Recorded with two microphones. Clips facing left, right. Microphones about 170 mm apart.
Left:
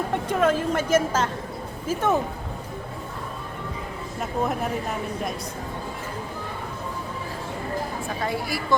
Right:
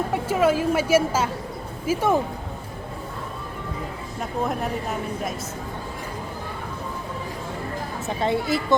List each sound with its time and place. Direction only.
0.1 s a woman's voice: 5° right (ahead or behind)
4.2 s speech: centre (ahead or behind)
8.0 s speech: 25° right (ahead or behind)